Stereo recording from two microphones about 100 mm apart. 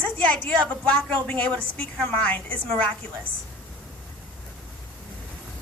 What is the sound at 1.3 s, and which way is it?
A woman's voice, 15° left (ahead or behind).